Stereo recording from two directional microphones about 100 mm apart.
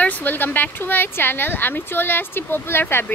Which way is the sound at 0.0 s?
15° left (ahead or behind).